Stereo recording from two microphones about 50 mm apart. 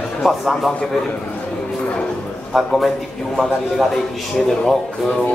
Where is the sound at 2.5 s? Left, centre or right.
Centre.